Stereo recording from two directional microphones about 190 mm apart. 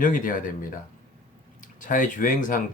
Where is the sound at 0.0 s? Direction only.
45° left (ahead or behind).